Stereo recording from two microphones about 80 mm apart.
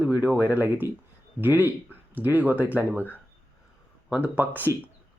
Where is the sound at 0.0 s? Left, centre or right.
Centre.